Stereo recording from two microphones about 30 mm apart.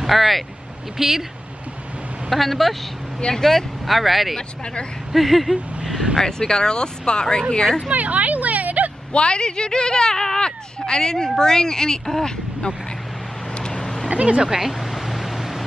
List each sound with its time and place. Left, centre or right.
0.0 s speech: centre
0.9 s speech: centre
2.2 s speech: centre
6.1 s speech: left
7.9 s speech: right
9.1 s speech: left
13.6 s vehicle: left
14.0 s a sound: right
14.5 s a sound: centre